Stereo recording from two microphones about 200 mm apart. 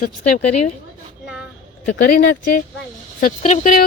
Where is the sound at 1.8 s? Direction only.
45° left (ahead or behind).